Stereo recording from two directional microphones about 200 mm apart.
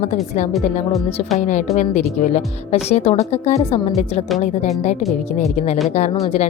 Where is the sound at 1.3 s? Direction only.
35° left (ahead or behind).